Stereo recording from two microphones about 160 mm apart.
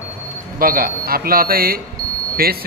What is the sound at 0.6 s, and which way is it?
Speech, 65° right (ahead or behind).